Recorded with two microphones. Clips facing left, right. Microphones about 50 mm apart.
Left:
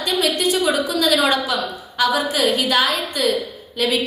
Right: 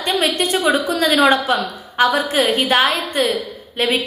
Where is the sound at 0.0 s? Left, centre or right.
Right.